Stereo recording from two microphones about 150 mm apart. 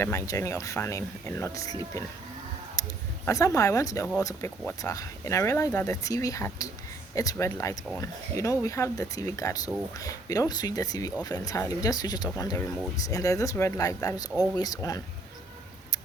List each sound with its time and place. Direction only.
0.3 s speech: 20° left (ahead or behind)
2.8 s a sound: 20° left (ahead or behind)
3.2 s speech: 20° left (ahead or behind)